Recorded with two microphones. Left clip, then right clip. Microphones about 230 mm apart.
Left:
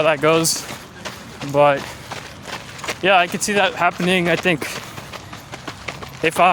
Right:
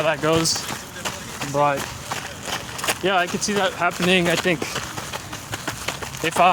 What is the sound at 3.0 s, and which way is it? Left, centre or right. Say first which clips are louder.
Speech: left 7 dB; left.